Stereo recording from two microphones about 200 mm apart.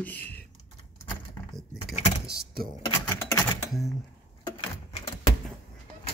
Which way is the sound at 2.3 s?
45° right (ahead or behind).